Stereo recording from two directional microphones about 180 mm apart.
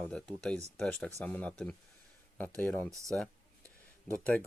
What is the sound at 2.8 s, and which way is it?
Speech, 15° right (ahead or behind).